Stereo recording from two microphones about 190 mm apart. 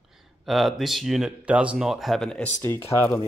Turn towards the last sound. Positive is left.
turn(degrees=10)  # may be behind; listen again after turning